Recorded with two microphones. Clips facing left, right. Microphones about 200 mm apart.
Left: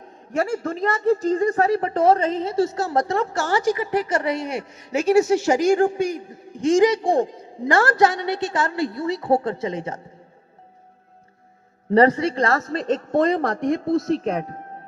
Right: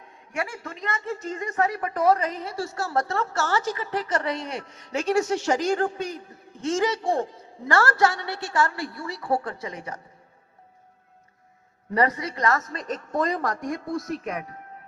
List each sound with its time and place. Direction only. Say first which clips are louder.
0.0 s speech: left 8 dB; 40° left (ahead or behind); by 10.0 s 25° left (ahead or behind)
11.9 s speech: left 8 dB; 30° left (ahead or behind)